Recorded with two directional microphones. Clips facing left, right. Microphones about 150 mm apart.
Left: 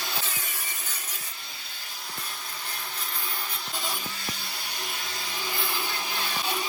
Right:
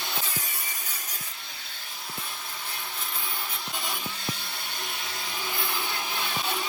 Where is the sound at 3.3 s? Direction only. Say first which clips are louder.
Even; centre (ahead or behind).